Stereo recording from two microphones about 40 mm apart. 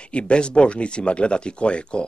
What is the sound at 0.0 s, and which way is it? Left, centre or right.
Speech, left.